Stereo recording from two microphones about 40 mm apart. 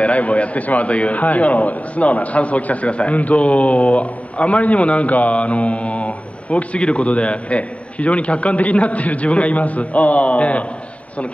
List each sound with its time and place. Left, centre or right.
0.0 s a man's voice: left